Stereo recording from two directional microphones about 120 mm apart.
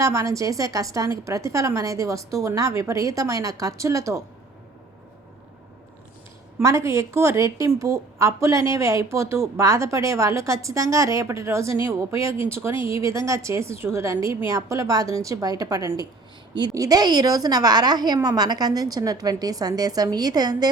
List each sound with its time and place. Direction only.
0.0 s speech: 25° right (ahead or behind)
6.6 s a woman's voice: 25° right (ahead or behind)